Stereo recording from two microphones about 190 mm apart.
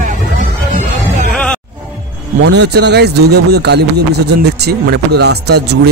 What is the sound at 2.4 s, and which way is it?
Speech, 65° right (ahead or behind).